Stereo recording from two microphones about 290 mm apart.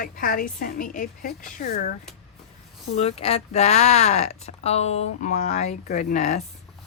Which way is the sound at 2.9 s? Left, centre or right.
Left.